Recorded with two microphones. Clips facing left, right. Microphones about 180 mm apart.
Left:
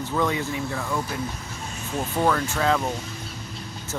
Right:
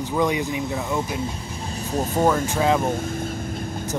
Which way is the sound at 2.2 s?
15° right (ahead or behind).